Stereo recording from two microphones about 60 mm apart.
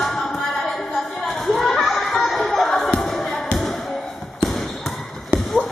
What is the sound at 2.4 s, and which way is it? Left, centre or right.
Basketball bounce, centre.